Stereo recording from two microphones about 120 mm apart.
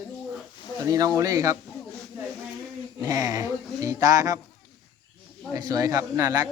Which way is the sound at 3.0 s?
30° right (ahead or behind).